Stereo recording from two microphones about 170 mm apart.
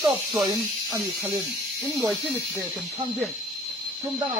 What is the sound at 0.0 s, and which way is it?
Speech, 25° right (ahead or behind).